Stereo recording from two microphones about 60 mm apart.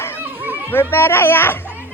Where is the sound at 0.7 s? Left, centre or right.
Left.